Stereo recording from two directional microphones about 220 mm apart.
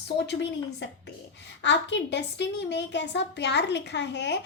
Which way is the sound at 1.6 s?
55° left (ahead or behind).